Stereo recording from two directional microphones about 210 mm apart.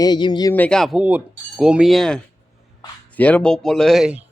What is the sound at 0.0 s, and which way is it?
Speech, 20° left (ahead or behind).